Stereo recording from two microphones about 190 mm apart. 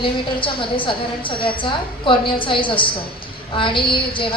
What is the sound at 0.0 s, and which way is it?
A woman's voice, 25° left (ahead or behind).